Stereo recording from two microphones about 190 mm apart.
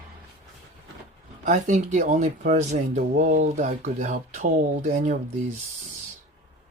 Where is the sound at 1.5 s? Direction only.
40° right (ahead or behind).